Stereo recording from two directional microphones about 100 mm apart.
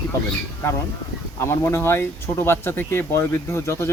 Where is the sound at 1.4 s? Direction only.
25° left (ahead or behind).